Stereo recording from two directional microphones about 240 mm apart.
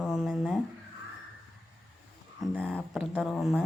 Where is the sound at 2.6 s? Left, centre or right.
Centre.